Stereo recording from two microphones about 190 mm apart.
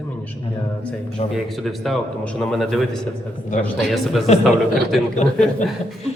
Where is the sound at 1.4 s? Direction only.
Centre (ahead or behind).